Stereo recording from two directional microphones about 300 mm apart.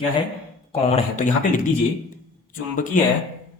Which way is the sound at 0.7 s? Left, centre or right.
Left.